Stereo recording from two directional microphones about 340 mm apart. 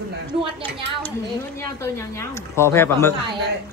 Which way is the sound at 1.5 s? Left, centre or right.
Centre.